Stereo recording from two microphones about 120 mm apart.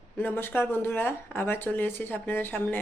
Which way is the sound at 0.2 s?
15° left (ahead or behind).